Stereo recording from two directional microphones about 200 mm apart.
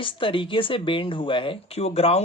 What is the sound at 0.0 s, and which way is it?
Speech, 25° left (ahead or behind).